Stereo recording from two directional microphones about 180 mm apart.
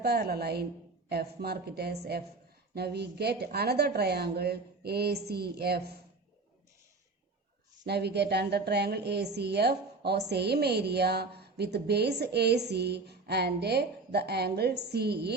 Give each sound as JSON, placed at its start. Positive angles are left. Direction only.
{"t": 0.0, "sound": "a woman's voice", "side_deg": -60}
{"t": 7.9, "sound": "a woman's voice", "side_deg": -65}